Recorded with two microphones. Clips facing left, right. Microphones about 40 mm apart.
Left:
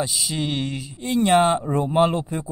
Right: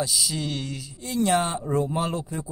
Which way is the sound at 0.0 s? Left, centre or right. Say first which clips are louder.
Left 2 dB; left.